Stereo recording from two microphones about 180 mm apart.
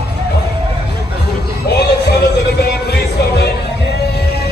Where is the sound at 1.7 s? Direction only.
65° left (ahead or behind).